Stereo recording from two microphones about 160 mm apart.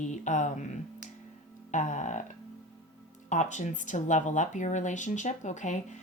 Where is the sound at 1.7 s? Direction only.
50° left (ahead or behind).